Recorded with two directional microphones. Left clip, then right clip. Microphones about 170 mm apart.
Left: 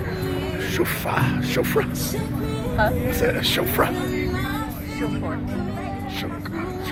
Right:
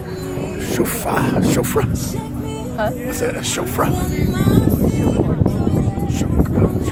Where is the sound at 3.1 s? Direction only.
20° right (ahead or behind).